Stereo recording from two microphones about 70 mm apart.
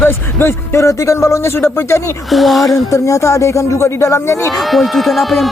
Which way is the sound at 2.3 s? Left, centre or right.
Centre.